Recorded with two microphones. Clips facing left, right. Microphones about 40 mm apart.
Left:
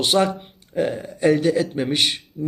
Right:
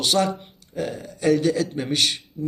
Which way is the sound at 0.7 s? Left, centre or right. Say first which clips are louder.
Left 6 dB; left.